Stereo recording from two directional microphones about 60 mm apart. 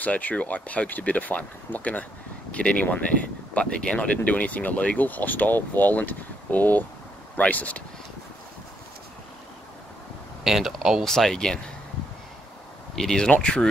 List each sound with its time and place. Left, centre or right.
0.0 s speech: left
10.4 s speech: centre
11.1 s speech: centre
12.9 s speech: centre